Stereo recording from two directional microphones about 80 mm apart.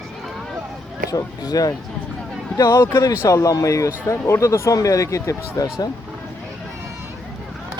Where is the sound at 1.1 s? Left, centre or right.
Left.